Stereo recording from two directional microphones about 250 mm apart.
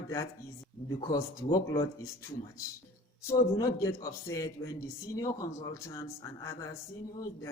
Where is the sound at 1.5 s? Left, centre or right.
Centre.